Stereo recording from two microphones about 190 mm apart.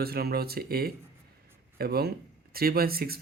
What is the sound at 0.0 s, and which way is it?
Speech, 55° right (ahead or behind).